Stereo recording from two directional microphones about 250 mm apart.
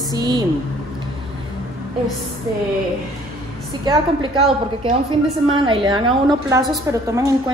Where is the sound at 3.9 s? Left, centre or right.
Centre.